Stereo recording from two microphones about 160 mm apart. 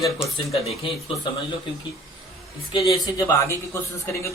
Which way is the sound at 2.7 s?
20° left (ahead or behind).